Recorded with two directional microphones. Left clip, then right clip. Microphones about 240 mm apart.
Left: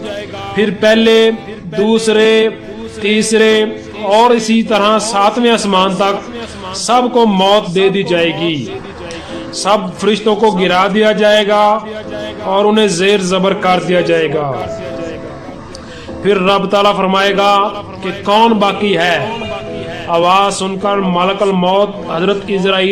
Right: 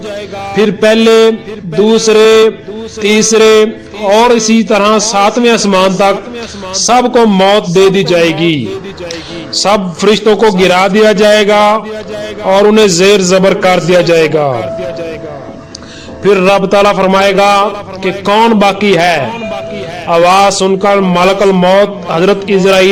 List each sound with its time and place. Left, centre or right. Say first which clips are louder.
0.5 s a man's voice: right 3 dB; centre
16.2 s a man's voice: right 4 dB; centre